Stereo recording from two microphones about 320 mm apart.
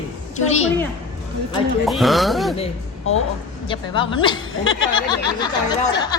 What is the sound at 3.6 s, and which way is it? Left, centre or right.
Speech, centre.